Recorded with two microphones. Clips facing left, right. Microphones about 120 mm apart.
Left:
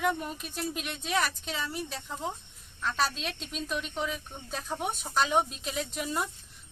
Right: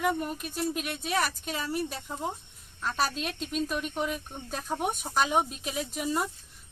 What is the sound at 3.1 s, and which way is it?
Speech, 50° right (ahead or behind).